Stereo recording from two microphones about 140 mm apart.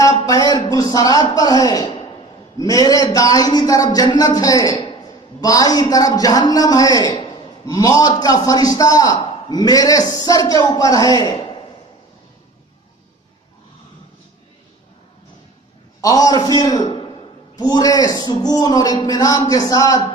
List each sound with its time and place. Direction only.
0.0 s a sound: 25° left (ahead or behind)
0.7 s a man's voice: 25° left (ahead or behind)
16.0 s a man's voice: 25° left (ahead or behind)